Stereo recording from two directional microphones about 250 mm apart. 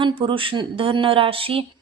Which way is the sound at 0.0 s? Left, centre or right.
Right.